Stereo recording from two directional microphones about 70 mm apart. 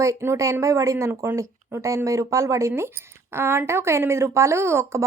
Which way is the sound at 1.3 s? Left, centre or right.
Right.